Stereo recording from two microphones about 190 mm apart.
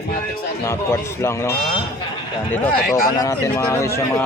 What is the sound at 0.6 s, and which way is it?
Speech, 15° left (ahead or behind).